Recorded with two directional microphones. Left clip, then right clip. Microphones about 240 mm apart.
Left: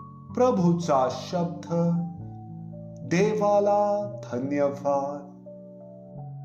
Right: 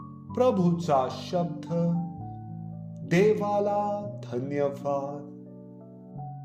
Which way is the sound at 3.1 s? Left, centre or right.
Right.